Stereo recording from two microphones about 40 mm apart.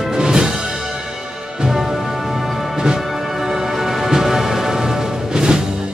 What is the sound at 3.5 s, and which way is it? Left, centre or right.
Music, centre.